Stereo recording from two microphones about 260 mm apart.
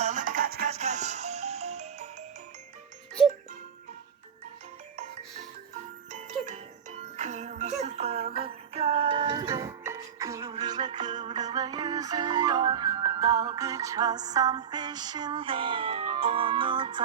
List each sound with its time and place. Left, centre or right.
0.0 s music: right
6.1 s music: right